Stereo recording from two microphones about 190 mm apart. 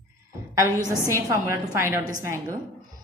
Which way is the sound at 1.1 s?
15° right (ahead or behind).